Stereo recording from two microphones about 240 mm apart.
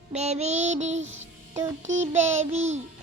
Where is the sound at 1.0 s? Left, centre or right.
Right.